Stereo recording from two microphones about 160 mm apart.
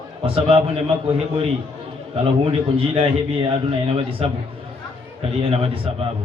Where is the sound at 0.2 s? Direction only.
35° right (ahead or behind).